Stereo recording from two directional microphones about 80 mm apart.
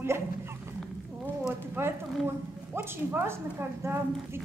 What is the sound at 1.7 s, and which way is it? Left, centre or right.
Speech, right.